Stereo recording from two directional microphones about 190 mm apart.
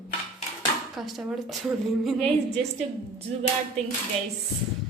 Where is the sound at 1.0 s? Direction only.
Centre (ahead or behind).